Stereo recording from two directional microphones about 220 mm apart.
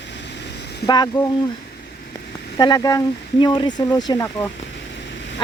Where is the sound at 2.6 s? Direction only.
20° left (ahead or behind).